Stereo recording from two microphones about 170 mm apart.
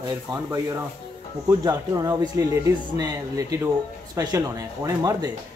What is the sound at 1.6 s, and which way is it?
Speech, 20° right (ahead or behind).